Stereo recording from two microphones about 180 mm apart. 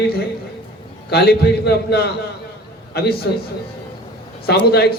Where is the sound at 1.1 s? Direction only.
60° left (ahead or behind).